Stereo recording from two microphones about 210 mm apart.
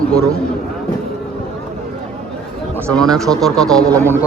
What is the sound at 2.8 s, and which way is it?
Speech, 5° left (ahead or behind).